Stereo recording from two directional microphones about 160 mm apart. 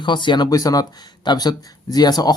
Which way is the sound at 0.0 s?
30° left (ahead or behind).